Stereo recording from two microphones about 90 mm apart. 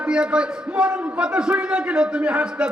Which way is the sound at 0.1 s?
10° right (ahead or behind).